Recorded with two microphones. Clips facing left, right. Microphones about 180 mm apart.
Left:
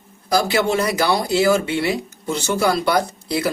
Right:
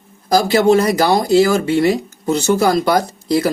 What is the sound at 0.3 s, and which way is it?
Speech, 40° right (ahead or behind).